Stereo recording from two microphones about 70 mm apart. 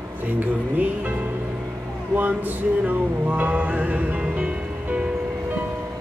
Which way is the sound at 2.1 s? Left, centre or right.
Right.